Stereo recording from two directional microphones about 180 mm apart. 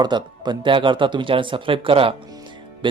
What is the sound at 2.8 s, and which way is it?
Music, 25° right (ahead or behind).